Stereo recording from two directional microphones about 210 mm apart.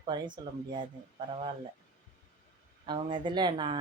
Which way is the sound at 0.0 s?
20° right (ahead or behind).